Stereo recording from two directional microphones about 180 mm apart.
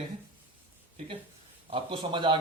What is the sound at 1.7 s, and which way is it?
Speech, 30° right (ahead or behind).